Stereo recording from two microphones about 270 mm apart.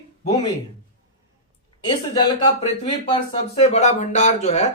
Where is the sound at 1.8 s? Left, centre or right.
Centre.